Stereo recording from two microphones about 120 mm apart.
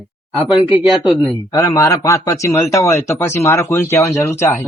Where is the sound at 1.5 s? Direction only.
30° left (ahead or behind).